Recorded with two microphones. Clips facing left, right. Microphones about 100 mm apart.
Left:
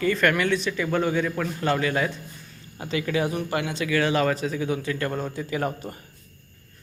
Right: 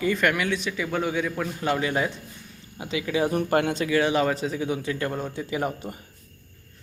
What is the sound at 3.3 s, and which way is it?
Speech, 45° right (ahead or behind).